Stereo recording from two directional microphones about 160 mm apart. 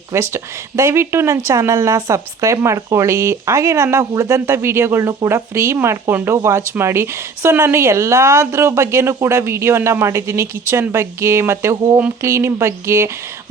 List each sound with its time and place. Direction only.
0.1 s speech: 15° right (ahead or behind)